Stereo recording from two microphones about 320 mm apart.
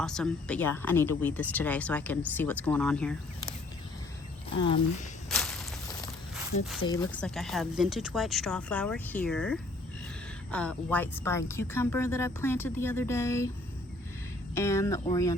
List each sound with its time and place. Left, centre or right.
0.0 s speech: centre
4.4 s speech: centre
5.3 s walk: centre
6.8 s speech: centre
14.5 s speech: centre